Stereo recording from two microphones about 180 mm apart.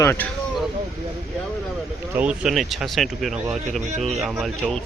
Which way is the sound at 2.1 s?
5° right (ahead or behind).